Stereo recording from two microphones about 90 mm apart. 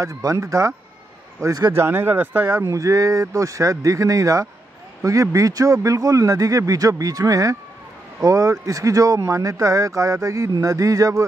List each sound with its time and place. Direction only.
0.0 s a man's voice: 35° right (ahead or behind)
1.4 s a man's voice: 45° right (ahead or behind)
1.7 s speech: 25° right (ahead or behind)
2.5 s a man's voice: 40° right (ahead or behind)